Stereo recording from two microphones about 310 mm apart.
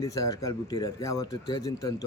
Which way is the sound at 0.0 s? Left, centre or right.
Centre.